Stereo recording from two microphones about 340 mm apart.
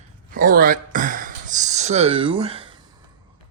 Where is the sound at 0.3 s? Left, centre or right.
Right.